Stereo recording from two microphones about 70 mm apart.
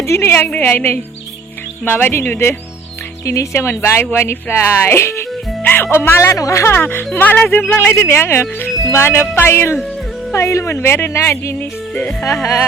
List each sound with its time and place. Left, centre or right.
0.0 s speech: left
0.5 s speech: left
3.2 s speech: left
6.1 s speech: left
6.7 s speech: left